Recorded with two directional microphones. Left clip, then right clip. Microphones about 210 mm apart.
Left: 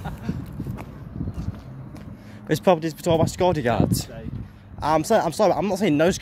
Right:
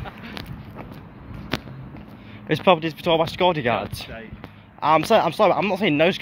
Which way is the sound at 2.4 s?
25° left (ahead or behind).